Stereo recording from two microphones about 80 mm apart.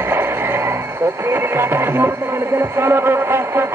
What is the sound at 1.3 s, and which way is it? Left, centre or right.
Speech, right.